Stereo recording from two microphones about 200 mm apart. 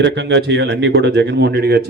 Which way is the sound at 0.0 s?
60° right (ahead or behind).